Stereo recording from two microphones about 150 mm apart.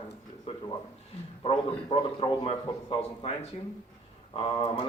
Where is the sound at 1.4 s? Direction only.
35° left (ahead or behind).